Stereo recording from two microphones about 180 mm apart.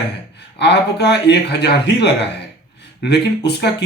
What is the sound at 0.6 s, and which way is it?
Speech, 70° left (ahead or behind).